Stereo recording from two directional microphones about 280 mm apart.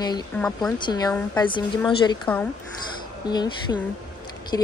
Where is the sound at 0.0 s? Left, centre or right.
Centre.